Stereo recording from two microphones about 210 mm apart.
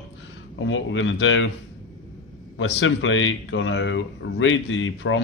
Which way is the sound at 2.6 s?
60° left (ahead or behind).